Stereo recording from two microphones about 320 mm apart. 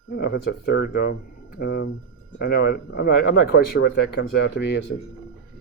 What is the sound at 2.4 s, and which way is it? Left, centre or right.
Speech, left.